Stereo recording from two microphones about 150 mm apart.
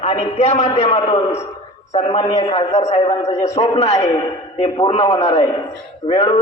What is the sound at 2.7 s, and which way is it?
A man's voice, 50° left (ahead or behind).